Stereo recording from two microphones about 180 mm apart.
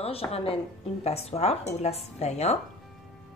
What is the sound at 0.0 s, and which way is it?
A woman's voice, 35° left (ahead or behind).